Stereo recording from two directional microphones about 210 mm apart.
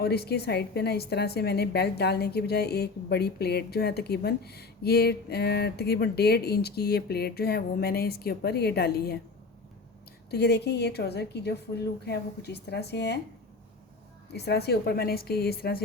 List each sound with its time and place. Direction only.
0.0 s a woman's voice: 50° left (ahead or behind)
10.3 s a woman's voice: 50° left (ahead or behind)
14.3 s a woman's voice: 50° left (ahead or behind)